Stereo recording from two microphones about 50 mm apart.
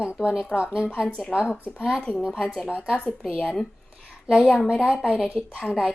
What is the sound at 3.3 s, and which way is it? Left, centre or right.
A woman's voice, centre.